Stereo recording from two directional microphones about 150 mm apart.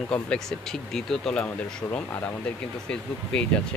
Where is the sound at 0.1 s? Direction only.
5° left (ahead or behind).